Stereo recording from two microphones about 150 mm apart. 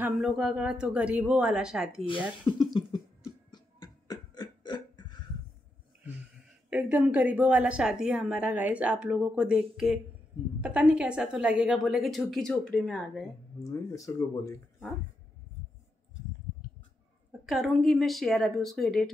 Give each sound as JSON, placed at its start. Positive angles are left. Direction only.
{"t": 0.2, "sound": "a woman's voice", "side_deg": -5}
{"t": 2.4, "sound": "cough", "side_deg": 30}
{"t": 3.5, "sound": "a sound", "side_deg": 25}
{"t": 6.7, "sound": "a woman's voice", "side_deg": -10}
{"t": 13.6, "sound": "speech", "side_deg": 25}
{"t": 17.3, "sound": "a woman's voice", "side_deg": 0}